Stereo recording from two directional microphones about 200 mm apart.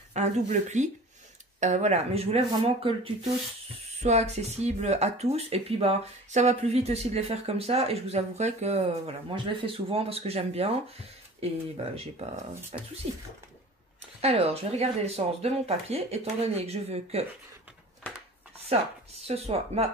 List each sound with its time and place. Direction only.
0.1 s speech: 35° right (ahead or behind)
14.2 s speech: 30° right (ahead or behind)
19.2 s speech: 30° right (ahead or behind)